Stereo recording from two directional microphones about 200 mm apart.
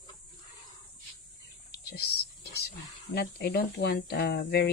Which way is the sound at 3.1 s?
55° left (ahead or behind).